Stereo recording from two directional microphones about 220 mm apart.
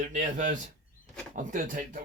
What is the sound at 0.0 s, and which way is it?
Speech, 35° right (ahead or behind).